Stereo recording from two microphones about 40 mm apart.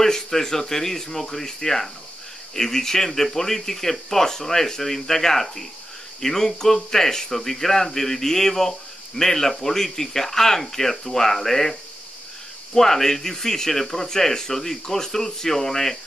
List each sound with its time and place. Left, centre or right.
0.0 s speech: centre
12.7 s speech: centre